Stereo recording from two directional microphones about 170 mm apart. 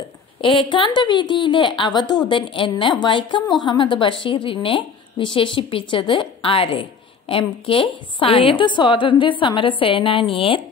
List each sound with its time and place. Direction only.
0.4 s a woman's voice: 30° left (ahead or behind)